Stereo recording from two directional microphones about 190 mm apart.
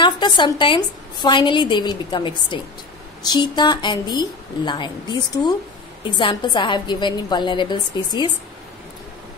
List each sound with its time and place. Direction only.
0.0 s a woman's voice: 25° left (ahead or behind)